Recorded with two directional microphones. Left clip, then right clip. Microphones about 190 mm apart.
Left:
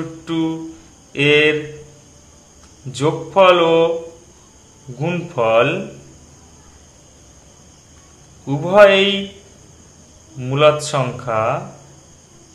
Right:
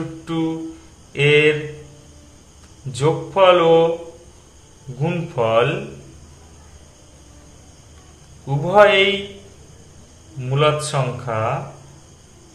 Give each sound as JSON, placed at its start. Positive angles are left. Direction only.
{"t": 0.2, "sound": "speech", "side_deg": 25}
{"t": 2.9, "sound": "speech", "side_deg": 25}
{"t": 5.0, "sound": "speech", "side_deg": 20}
{"t": 8.5, "sound": "speech", "side_deg": 20}
{"t": 10.4, "sound": "speech", "side_deg": 25}